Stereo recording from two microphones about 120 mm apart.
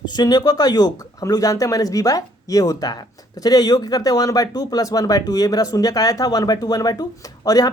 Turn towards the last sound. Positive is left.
turn(degrees=30)  # may be behind; listen again after turning